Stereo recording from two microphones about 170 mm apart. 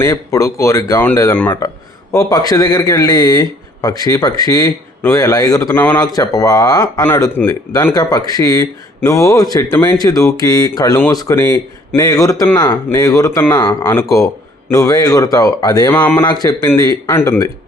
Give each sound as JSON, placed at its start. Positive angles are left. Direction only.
{"t": 0.0, "sound": "speech", "side_deg": 20}